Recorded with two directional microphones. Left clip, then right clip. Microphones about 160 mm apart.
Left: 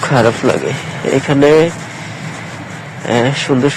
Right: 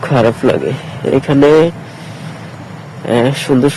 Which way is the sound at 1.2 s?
55° right (ahead or behind).